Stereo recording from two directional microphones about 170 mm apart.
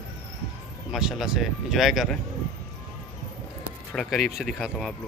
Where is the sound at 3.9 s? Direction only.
Centre (ahead or behind).